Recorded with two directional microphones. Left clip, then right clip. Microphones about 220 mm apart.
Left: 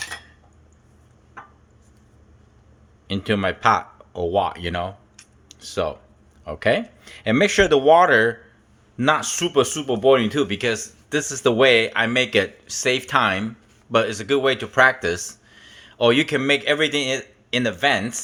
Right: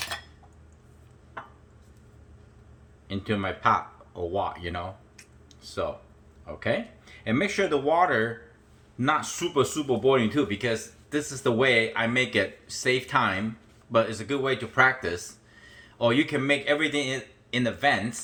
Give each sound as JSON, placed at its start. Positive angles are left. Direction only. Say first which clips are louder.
{"t": 3.1, "sound": "speech", "louder": "left 7 dB", "side_deg": 50}
{"t": 5.5, "sound": "a sound", "louder": "left 7 dB", "side_deg": 50}
{"t": 6.4, "sound": "speech", "louder": "left 8 dB", "side_deg": 55}